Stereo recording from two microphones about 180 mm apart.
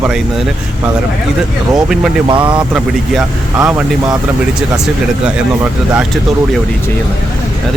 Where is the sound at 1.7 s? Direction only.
5° right (ahead or behind).